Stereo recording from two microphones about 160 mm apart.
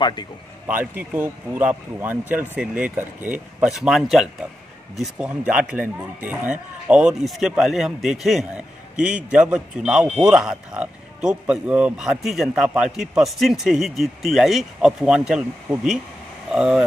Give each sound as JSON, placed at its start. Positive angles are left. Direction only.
{"t": 0.0, "sound": "a man's voice", "side_deg": 30}
{"t": 0.7, "sound": "speech", "side_deg": -10}